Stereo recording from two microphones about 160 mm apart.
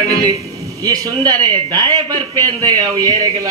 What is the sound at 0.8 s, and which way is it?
A man's voice, 25° right (ahead or behind).